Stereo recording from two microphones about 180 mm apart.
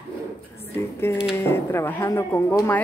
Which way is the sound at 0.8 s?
15° left (ahead or behind).